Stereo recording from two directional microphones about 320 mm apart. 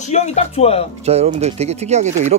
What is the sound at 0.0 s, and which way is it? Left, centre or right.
Speech, left.